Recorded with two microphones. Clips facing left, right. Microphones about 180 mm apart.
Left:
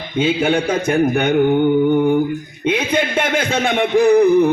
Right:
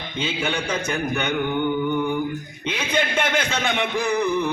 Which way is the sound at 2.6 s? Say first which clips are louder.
Left 7 dB; 55° left (ahead or behind).